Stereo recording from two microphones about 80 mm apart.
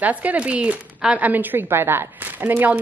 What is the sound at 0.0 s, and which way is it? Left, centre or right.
A woman's voice, centre.